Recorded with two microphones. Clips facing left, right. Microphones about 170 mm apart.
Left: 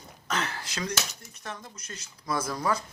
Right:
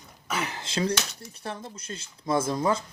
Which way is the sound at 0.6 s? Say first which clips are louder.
Right 7 dB; 30° right (ahead or behind).